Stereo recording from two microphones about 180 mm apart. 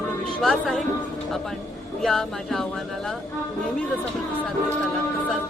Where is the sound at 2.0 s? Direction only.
Centre (ahead or behind).